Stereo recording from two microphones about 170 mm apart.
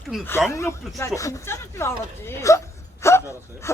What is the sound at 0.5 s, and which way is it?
Speech, 15° left (ahead or behind).